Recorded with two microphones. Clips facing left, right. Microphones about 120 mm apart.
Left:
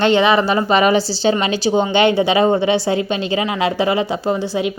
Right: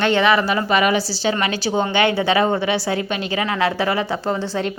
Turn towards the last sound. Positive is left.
turn(degrees=10)  # may be behind; listen again after turning